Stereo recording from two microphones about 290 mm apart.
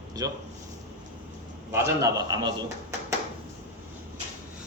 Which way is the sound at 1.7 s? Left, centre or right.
Centre.